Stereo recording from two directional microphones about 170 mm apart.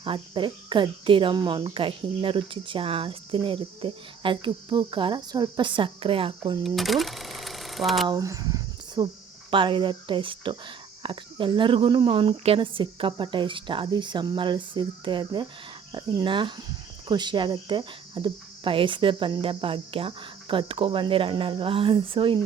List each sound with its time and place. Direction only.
0.0 s speech: 30° right (ahead or behind)
6.6 s speech: centre (ahead or behind)
8.0 s speech: 20° right (ahead or behind)